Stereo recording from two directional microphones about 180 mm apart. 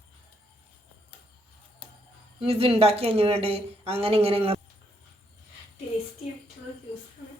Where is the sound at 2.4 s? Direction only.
35° right (ahead or behind).